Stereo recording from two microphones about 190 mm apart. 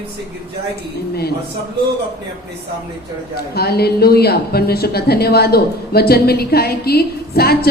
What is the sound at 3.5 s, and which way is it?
Speech, 55° left (ahead or behind).